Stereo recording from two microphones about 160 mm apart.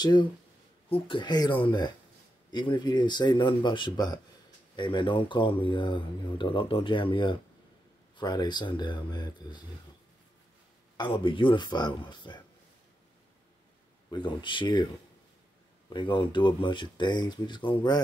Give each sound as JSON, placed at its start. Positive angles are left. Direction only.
{"t": 0.0, "sound": "speech", "side_deg": 25}
{"t": 11.0, "sound": "speech", "side_deg": 30}
{"t": 14.1, "sound": "speech", "side_deg": 30}
{"t": 15.9, "sound": "speech", "side_deg": 30}